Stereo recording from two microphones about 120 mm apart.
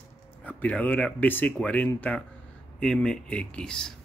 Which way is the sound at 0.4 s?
15° left (ahead or behind).